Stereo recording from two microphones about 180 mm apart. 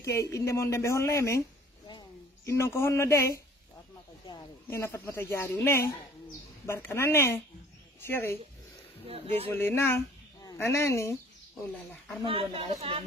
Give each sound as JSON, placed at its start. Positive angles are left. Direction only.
{"t": 0.2, "sound": "a woman's voice", "side_deg": 15}
{"t": 1.9, "sound": "a sound", "side_deg": 20}
{"t": 4.6, "sound": "a woman's voice", "side_deg": 15}
{"t": 9.0, "sound": "speech", "side_deg": -35}
{"t": 9.5, "sound": "speech", "side_deg": 10}
{"t": 12.2, "sound": "speech", "side_deg": -30}